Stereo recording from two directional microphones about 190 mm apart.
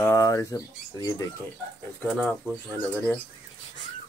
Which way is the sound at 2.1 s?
Centre (ahead or behind).